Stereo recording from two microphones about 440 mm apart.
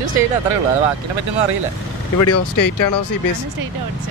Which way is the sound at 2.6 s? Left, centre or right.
Left.